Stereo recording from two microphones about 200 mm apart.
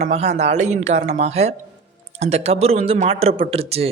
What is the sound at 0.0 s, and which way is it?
Speech, 35° right (ahead or behind).